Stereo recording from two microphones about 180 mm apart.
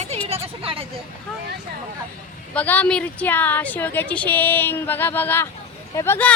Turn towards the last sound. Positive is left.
turn(degrees=15)  # may be behind; listen again after turning